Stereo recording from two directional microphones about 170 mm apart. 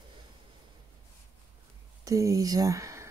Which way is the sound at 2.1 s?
20° right (ahead or behind).